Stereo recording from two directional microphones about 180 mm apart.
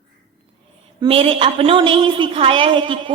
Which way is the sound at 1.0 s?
30° right (ahead or behind).